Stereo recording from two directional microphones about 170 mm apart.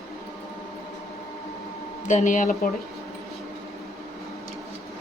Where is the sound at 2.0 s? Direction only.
45° left (ahead or behind).